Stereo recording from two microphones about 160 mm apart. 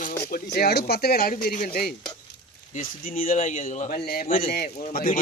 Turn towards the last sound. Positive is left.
turn(degrees=60)  # may be behind; listen again after turning